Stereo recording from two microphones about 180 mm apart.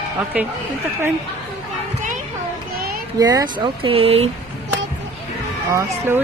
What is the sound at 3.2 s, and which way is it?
Speech, 20° right (ahead or behind).